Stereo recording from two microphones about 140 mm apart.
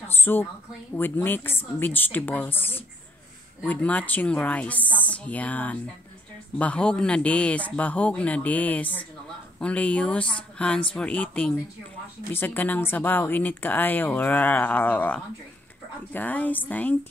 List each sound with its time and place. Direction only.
0.1 s a woman's voice: 15° left (ahead or behind)